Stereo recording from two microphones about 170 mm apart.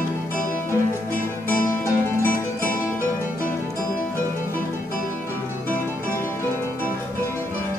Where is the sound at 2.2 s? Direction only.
55° left (ahead or behind).